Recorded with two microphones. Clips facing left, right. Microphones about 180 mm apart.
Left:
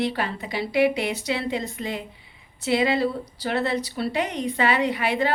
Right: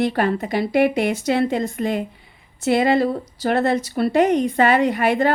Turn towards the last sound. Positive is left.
turn(degrees=-50)  # may be behind; listen again after turning